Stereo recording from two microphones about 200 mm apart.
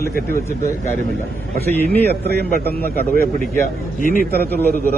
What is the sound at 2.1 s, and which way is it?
A man's voice, 50° right (ahead or behind).